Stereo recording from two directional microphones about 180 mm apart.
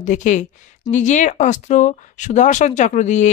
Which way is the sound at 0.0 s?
45° left (ahead or behind).